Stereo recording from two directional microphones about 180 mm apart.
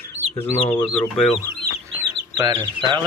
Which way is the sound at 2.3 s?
25° right (ahead or behind).